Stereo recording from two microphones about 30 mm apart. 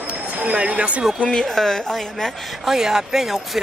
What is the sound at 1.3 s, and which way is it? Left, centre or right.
Speech, centre.